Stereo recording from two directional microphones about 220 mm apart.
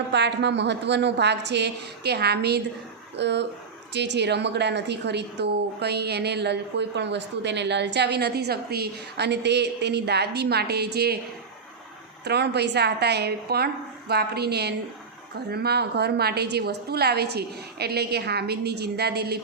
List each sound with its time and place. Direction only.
0.1 s a woman's voice: 50° right (ahead or behind)
12.2 s a woman's voice: 50° right (ahead or behind)